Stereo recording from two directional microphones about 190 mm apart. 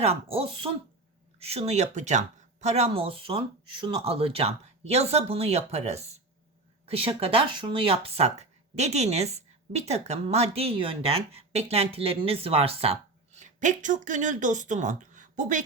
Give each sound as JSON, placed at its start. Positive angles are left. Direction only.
{"t": 0.0, "sound": "speech", "side_deg": -30}